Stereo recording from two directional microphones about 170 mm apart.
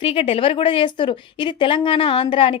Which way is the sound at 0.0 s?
35° left (ahead or behind).